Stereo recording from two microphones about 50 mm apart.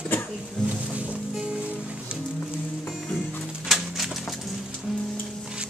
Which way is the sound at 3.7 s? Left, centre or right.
Centre.